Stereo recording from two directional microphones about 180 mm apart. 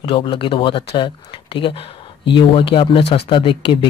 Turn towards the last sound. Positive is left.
turn(degrees=30)  # may be behind; listen again after turning